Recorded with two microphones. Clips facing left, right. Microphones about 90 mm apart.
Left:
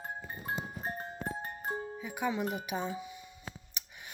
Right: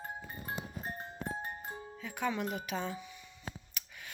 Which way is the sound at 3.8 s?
20° left (ahead or behind).